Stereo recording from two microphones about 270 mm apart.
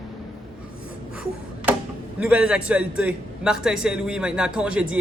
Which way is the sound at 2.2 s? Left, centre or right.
Centre.